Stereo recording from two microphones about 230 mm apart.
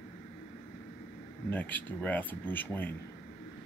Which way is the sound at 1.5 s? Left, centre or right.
Centre.